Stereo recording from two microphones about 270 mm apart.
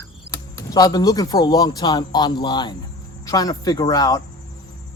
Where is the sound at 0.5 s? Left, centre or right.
Centre.